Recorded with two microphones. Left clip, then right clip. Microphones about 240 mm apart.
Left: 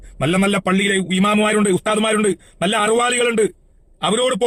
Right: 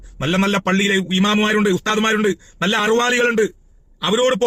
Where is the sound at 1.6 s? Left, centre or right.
Centre.